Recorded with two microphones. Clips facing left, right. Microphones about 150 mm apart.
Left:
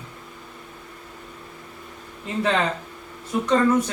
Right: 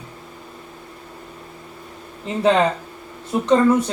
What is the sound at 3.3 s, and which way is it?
Speech, 30° right (ahead or behind).